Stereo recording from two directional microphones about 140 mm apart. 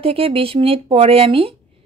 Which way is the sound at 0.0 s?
40° right (ahead or behind).